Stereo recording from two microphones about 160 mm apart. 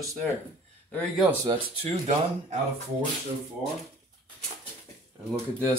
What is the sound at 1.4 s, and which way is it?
Speech, 30° right (ahead or behind).